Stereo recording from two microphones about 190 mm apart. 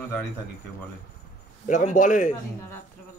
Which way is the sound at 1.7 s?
45° left (ahead or behind).